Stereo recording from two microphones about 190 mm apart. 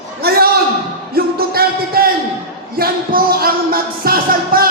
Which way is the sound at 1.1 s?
55° right (ahead or behind).